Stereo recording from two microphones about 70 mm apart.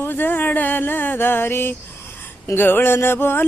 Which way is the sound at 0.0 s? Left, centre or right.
Left.